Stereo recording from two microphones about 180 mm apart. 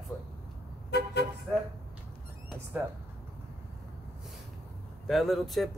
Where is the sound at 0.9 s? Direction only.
65° left (ahead or behind).